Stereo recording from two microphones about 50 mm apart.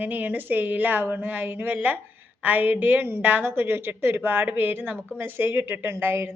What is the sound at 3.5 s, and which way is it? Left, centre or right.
A woman's voice, right.